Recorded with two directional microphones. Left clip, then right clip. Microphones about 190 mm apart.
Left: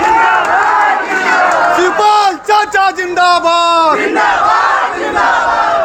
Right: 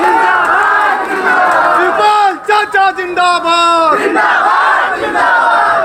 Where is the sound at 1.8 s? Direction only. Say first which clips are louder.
Even; 55° left (ahead or behind).